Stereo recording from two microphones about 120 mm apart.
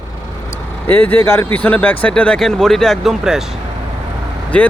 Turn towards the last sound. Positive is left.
turn(degrees=10)  # may be behind; listen again after turning